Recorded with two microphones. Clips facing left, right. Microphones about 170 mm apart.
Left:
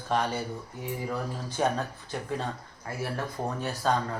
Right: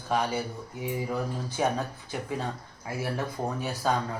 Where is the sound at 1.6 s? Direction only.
5° right (ahead or behind).